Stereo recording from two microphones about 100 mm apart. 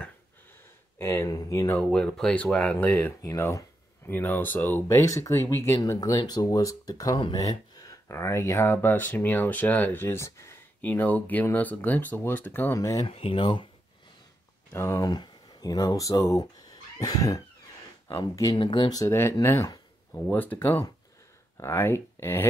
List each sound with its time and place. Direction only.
0.9 s speech: 25° left (ahead or behind)
1.3 s speech: 40° left (ahead or behind)
1.8 s speech: 10° left (ahead or behind)
3.3 s speech: 30° left (ahead or behind)
4.9 s speech: 35° left (ahead or behind)
12.7 s speech: 35° left (ahead or behind)
13.0 s speech: 70° left (ahead or behind)
14.7 s speech: 25° left (ahead or behind)
15.0 s speech: 40° left (ahead or behind)
18.5 s speech: 55° left (ahead or behind)
19.0 s speech: 25° left (ahead or behind)